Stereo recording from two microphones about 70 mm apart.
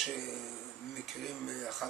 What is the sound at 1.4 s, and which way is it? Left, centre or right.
Speech, centre.